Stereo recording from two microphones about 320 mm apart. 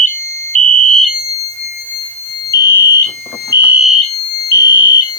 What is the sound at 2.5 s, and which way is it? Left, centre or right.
Fire alarm, centre.